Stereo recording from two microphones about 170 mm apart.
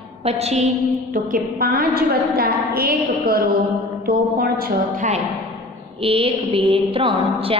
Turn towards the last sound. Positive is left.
turn(degrees=-30)  # may be behind; listen again after turning